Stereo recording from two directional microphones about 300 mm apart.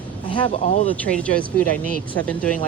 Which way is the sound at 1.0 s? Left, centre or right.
Centre.